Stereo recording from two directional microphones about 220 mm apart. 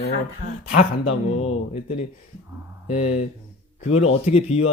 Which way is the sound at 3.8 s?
30° left (ahead or behind).